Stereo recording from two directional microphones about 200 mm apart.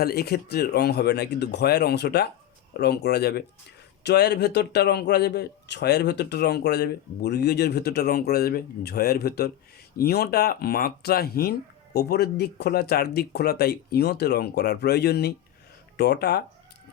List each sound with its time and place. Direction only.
0.0 s a man's voice: 50° left (ahead or behind)